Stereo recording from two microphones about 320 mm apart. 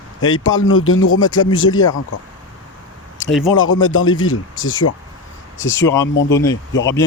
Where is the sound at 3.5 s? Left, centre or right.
Left.